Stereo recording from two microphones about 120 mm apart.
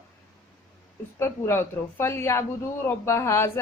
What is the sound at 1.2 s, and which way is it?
Speech, 20° left (ahead or behind).